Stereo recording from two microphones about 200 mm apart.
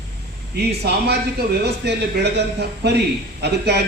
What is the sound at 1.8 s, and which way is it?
A man's voice, 55° right (ahead or behind).